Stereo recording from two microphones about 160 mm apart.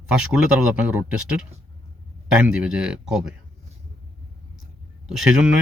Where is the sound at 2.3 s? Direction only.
5° right (ahead or behind).